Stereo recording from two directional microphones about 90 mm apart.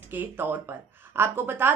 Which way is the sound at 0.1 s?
20° right (ahead or behind).